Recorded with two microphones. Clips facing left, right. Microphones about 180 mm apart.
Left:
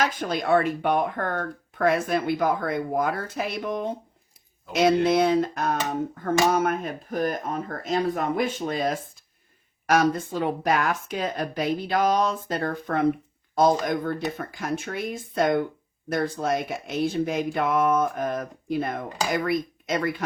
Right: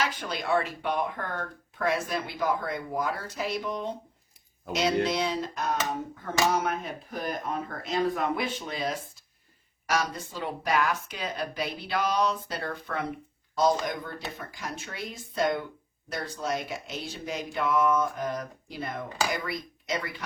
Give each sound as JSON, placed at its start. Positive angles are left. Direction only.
{"t": 0.0, "sound": "speech", "side_deg": 45}